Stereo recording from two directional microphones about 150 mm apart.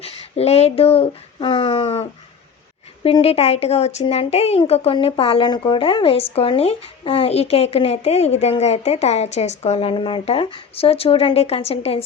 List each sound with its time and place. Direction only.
0.0 s speech: 40° left (ahead or behind)